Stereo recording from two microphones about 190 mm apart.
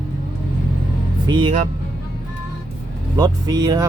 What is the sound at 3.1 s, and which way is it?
Speech, 20° right (ahead or behind).